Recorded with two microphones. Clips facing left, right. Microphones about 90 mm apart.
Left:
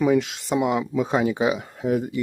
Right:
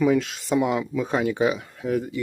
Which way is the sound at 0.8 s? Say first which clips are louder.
Left 3 dB; 20° left (ahead or behind).